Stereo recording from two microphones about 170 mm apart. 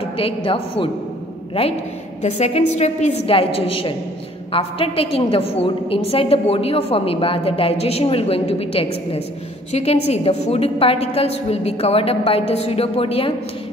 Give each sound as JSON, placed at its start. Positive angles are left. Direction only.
{"t": 0.2, "sound": "a woman's voice", "side_deg": 30}
{"t": 2.2, "sound": "a woman's voice", "side_deg": 40}